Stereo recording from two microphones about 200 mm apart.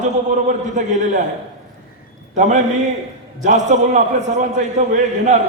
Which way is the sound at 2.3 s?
40° right (ahead or behind).